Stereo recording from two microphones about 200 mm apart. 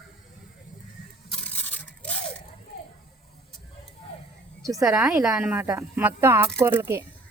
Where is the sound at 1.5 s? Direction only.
10° left (ahead or behind).